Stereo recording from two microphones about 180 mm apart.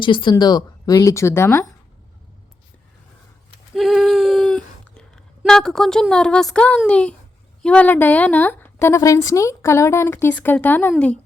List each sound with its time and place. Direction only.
0.0 s a woman's voice: 25° left (ahead or behind)
3.8 s a sound: centre (ahead or behind)
5.4 s a woman's voice: 5° left (ahead or behind)